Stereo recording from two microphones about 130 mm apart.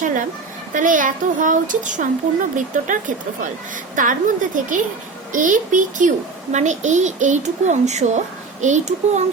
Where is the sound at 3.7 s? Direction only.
85° right.